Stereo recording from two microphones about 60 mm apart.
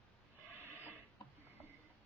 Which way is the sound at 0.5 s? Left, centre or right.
Right.